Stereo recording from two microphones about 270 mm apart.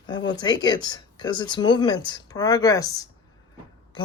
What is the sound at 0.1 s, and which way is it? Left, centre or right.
Speech, centre.